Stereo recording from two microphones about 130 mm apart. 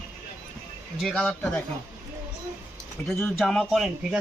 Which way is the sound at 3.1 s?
5° left (ahead or behind).